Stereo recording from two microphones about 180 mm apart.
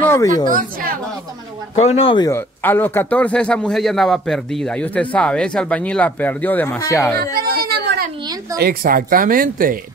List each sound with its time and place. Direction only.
0.0 s a sound: 15° left (ahead or behind)
0.5 s speech: 50° right (ahead or behind)
1.8 s speech: 35° left (ahead or behind)
2.3 s speech: 10° left (ahead or behind)
7.3 s a sound: 55° right (ahead or behind)
8.5 s speech: 55° right (ahead or behind)